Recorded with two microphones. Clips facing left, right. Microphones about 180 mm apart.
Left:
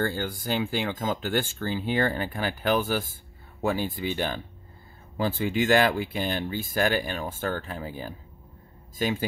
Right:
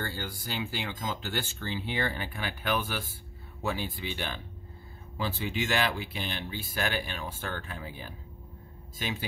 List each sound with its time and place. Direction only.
0.0 s speech: 50° left (ahead or behind)